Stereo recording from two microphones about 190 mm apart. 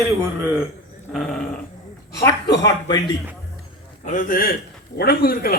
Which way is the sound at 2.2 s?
20° left (ahead or behind).